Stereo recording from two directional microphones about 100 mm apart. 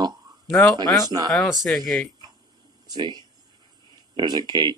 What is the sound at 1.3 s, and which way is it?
Speech, centre (ahead or behind).